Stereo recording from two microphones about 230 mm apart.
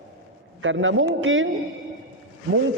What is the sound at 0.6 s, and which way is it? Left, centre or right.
Speech, right.